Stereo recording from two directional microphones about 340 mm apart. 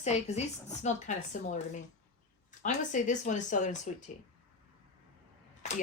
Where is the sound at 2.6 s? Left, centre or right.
Left.